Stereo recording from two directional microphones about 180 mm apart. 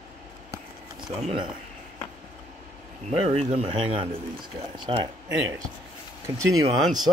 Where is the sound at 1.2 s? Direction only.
30° right (ahead or behind).